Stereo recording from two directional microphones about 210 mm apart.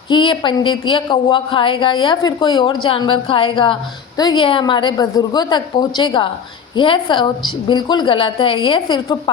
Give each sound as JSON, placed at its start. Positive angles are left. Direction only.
{"t": 0.1, "sound": "a woman's voice", "side_deg": 25}